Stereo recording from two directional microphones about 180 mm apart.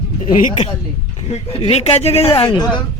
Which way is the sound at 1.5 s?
35° left (ahead or behind).